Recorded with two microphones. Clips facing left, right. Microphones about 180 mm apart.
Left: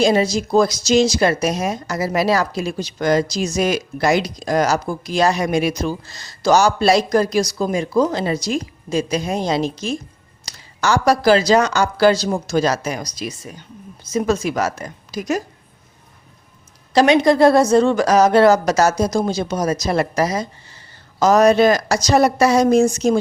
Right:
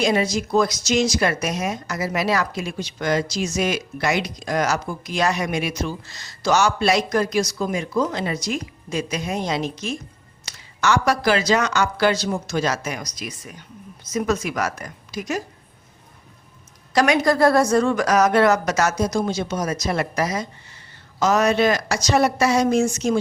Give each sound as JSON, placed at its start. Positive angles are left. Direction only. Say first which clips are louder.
{"t": 0.0, "sound": "a woman's voice", "louder": "left 4 dB", "side_deg": 30}
{"t": 16.9, "sound": "speech", "louder": "left 5 dB", "side_deg": 25}